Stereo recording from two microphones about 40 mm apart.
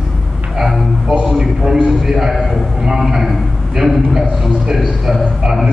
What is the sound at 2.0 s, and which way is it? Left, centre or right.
A man's voice, centre.